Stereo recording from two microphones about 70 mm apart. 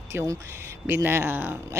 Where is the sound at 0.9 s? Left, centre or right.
Right.